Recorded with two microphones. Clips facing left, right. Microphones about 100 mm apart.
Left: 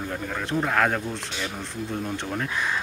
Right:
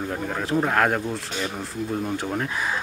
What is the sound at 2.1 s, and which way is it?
Speech, 5° right (ahead or behind).